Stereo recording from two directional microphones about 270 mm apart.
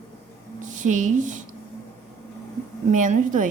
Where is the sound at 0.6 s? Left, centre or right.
Right.